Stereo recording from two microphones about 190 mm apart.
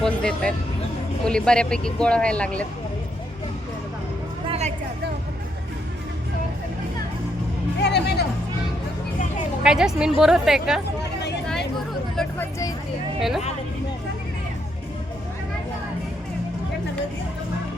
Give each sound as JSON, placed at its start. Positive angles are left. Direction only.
{"t": 0.0, "sound": "speech", "side_deg": 5}
{"t": 4.4, "sound": "music", "side_deg": -35}
{"t": 7.8, "sound": "speech", "side_deg": 65}
{"t": 9.6, "sound": "speech", "side_deg": -5}
{"t": 12.1, "sound": "a sound", "side_deg": 5}